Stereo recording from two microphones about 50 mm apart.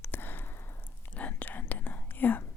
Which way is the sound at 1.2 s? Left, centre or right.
Left.